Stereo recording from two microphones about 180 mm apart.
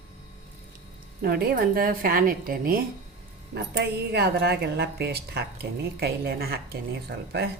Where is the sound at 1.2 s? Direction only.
55° right (ahead or behind).